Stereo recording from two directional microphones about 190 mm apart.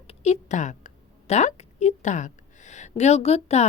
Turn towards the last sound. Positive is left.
turn(degrees=35)  # may be behind; listen again after turning